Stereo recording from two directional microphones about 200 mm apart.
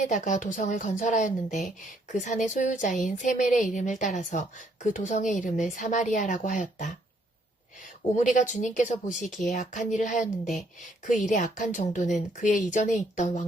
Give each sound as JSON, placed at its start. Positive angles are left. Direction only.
{"t": 0.0, "sound": "a woman's voice", "side_deg": 40}
{"t": 8.1, "sound": "a woman's voice", "side_deg": 40}